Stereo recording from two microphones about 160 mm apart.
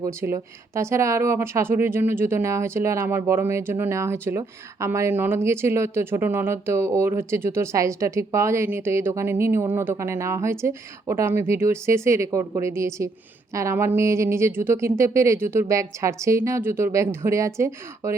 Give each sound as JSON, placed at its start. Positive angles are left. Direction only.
{"t": 0.0, "sound": "speech", "side_deg": -20}